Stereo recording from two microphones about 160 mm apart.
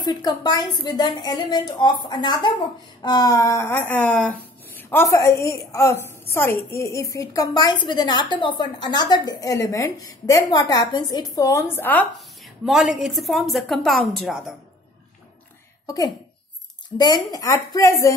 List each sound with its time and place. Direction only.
0.0 s a woman's voice: 25° left (ahead or behind)
12.2 s a sound: centre (ahead or behind)
12.9 s speech: centre (ahead or behind)
15.9 s a woman's voice: 25° left (ahead or behind)
17.3 s a woman's voice: 20° left (ahead or behind)